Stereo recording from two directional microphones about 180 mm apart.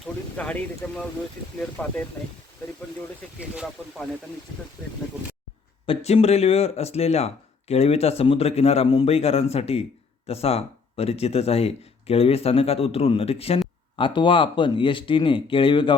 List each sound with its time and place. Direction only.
0.0 s speech: 5° left (ahead or behind)
5.8 s speech: 35° left (ahead or behind)